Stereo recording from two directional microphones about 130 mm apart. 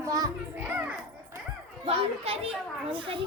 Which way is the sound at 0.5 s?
10° right (ahead or behind).